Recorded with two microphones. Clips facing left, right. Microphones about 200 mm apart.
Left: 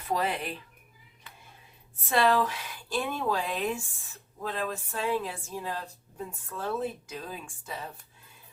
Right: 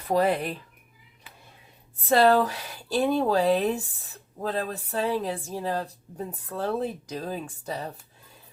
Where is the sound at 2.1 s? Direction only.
40° right (ahead or behind).